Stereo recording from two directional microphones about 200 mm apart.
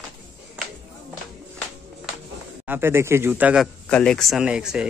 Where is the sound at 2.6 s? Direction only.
10° right (ahead or behind).